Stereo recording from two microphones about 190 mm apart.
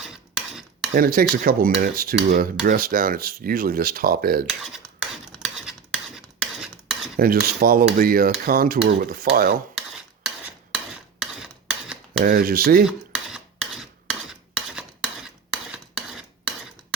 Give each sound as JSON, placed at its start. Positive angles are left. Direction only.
{"t": 0.0, "sound": "cutlery", "side_deg": -5}
{"t": 0.9, "sound": "speech", "side_deg": -50}
{"t": 4.4, "sound": "cutlery", "side_deg": -5}
{"t": 4.9, "sound": "a sound", "side_deg": -5}
{"t": 7.2, "sound": "speech", "side_deg": -50}
{"t": 11.2, "sound": "a sound", "side_deg": -5}
{"t": 12.2, "sound": "speech", "side_deg": -50}
{"t": 12.8, "sound": "cutlery", "side_deg": -5}